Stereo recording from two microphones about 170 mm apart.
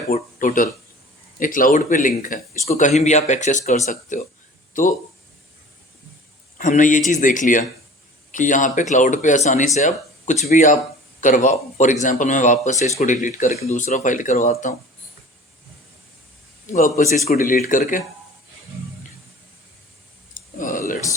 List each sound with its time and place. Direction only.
0.1 s speech: 50° left (ahead or behind)
6.6 s speech: 50° left (ahead or behind)
16.6 s speech: 45° left (ahead or behind)
20.6 s a sound: 50° left (ahead or behind)